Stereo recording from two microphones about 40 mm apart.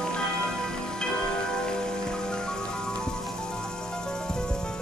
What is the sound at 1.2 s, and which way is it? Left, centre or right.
Music, centre.